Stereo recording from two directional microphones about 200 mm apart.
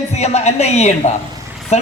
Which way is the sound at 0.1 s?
35° left (ahead or behind).